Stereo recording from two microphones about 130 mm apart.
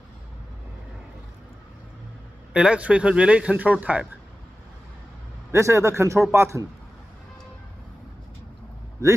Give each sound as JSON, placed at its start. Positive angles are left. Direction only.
{"t": 2.5, "sound": "speech", "side_deg": -10}
{"t": 5.5, "sound": "a man's voice", "side_deg": -20}